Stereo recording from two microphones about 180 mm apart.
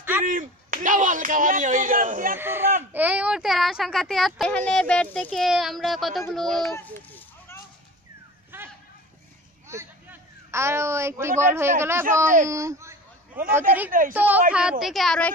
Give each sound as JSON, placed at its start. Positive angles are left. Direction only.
{"t": 0.2, "sound": "speech", "side_deg": -45}
{"t": 2.3, "sound": "a woman's voice", "side_deg": -10}
{"t": 8.5, "sound": "a sound", "side_deg": -10}
{"t": 10.5, "sound": "a woman's voice", "side_deg": -15}